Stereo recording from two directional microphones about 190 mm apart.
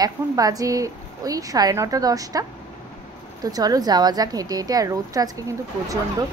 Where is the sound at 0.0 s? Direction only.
20° right (ahead or behind).